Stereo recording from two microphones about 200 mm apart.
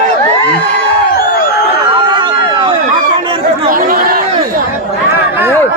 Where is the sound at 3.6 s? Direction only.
45° right (ahead or behind).